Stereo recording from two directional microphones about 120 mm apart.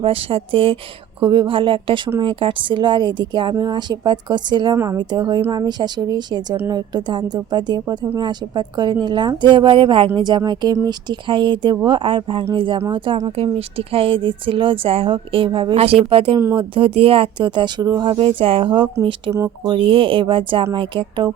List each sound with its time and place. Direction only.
0.0 s speech: 50° right (ahead or behind)
13.3 s speech: 55° right (ahead or behind)